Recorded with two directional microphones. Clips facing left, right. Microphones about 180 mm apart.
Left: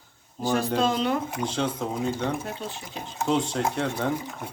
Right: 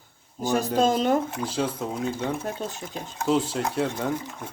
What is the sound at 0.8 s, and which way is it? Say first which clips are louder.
Speech: right 7 dB; 45° right (ahead or behind).